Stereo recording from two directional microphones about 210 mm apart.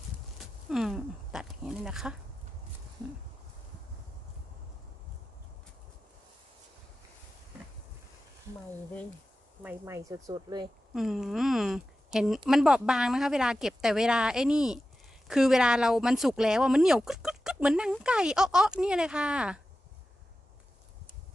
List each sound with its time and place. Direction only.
0.4 s speech: centre (ahead or behind)
9.6 s speech: 10° right (ahead or behind)
10.9 s speech: centre (ahead or behind)